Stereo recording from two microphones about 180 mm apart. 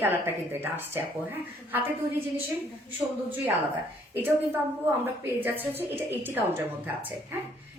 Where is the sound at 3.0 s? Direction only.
10° right (ahead or behind).